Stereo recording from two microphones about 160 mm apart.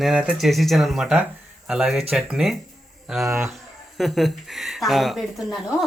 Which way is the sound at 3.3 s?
15° right (ahead or behind).